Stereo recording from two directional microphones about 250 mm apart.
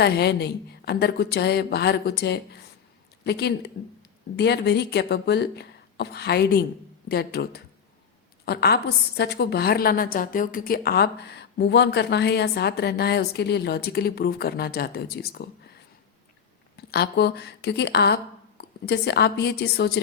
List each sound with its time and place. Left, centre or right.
0.0 s a woman's voice: left
16.7 s speech: left